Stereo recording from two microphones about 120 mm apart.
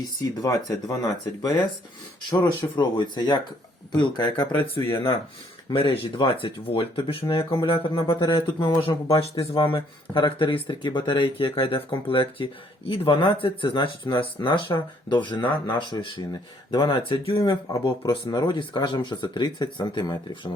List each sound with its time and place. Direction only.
0.0 s speech: 30° left (ahead or behind)
2.7 s speech: 40° left (ahead or behind)
4.8 s speech: 25° left (ahead or behind)
5.7 s speech: 50° left (ahead or behind)
8.9 s speech: 30° left (ahead or behind)